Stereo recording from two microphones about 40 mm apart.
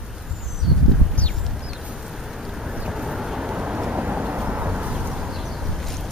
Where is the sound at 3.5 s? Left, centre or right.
Right.